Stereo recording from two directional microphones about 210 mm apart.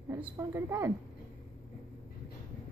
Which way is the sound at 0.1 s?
10° right (ahead or behind).